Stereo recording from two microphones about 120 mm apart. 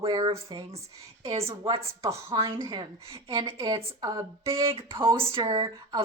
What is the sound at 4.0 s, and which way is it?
Speech, 25° right (ahead or behind).